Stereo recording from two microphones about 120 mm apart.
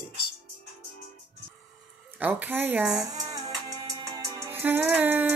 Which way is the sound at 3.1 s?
35° right (ahead or behind).